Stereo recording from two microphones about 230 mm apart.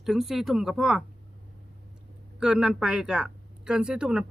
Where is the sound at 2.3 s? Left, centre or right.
Centre.